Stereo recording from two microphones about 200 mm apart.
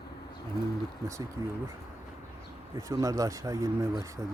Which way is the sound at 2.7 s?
15° right (ahead or behind).